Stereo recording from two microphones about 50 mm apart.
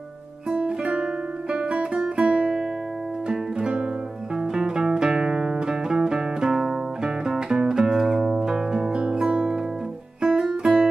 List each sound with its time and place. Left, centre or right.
0.5 s guitar: centre
3.3 s music: centre